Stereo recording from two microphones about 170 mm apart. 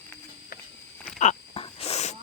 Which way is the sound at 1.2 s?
40° left (ahead or behind).